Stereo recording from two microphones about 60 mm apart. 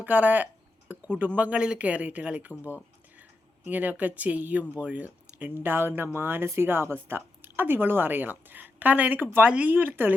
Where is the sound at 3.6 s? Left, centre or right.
Right.